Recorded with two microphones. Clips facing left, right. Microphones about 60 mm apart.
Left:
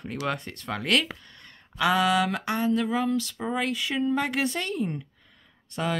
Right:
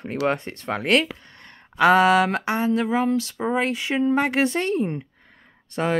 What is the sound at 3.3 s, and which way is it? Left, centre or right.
A woman's voice, centre.